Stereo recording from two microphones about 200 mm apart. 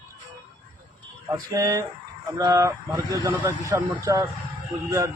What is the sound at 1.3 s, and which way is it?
A man's voice, 15° right (ahead or behind).